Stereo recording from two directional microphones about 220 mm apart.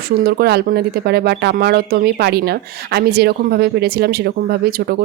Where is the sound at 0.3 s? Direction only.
45° right (ahead or behind).